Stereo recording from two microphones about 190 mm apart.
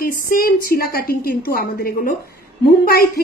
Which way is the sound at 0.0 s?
50° left (ahead or behind).